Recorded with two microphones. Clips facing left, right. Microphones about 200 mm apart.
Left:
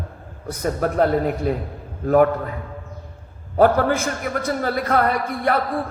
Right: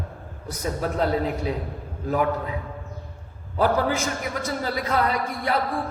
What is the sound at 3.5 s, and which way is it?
A man's voice, 55° left (ahead or behind).